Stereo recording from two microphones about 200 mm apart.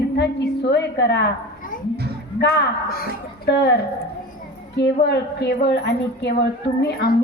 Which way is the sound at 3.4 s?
55° left (ahead or behind).